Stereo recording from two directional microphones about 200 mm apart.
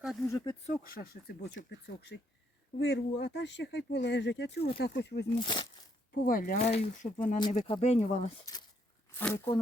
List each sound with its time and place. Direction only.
0.0 s a sound: centre (ahead or behind)
0.3 s speech: 15° left (ahead or behind)
0.6 s speech: 40° left (ahead or behind); by 5.2 s 55° left (ahead or behind)
5.3 s speech: 25° left (ahead or behind)
6.2 s speech: 45° left (ahead or behind)
7.3 s speech: 25° left (ahead or behind)
9.1 s speech: 10° left (ahead or behind)